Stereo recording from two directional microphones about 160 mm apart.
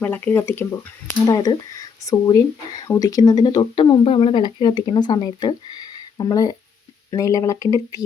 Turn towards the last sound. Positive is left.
turn(degrees=20)  # may be behind; listen again after turning